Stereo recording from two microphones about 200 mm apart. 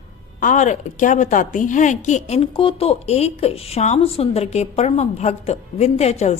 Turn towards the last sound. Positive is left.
turn(degrees=35)  # may be behind; listen again after turning